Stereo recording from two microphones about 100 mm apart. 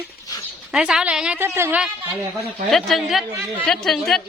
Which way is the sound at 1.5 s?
25° right (ahead or behind).